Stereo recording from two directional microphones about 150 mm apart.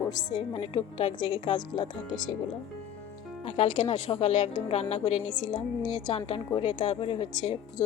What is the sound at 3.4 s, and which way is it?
Speech, 40° left (ahead or behind).